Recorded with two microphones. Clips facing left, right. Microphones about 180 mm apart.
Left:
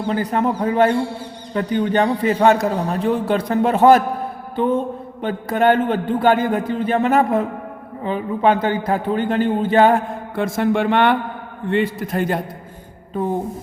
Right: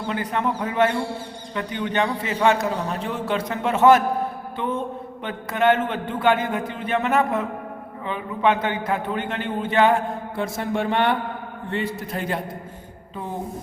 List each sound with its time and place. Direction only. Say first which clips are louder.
0.1 s a man's voice: left 5 dB; 40° left (ahead or behind)
4.5 s music: left 9 dB; 35° left (ahead or behind)
5.2 s a man's voice: left 4 dB; 40° left (ahead or behind)
10.3 s a man's voice: left 8 dB; 80° left